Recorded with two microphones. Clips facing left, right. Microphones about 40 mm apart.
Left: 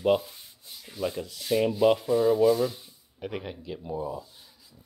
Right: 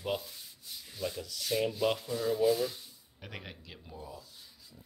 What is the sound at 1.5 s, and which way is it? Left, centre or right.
Sanding, centre.